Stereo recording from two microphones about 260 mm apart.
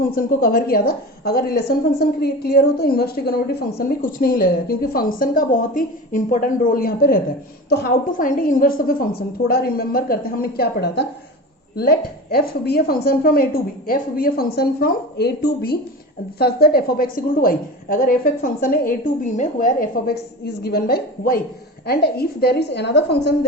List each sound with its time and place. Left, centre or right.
0.1 s a woman's voice: left